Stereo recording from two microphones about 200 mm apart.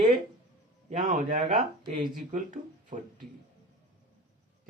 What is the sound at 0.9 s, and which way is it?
Speech, 40° right (ahead or behind).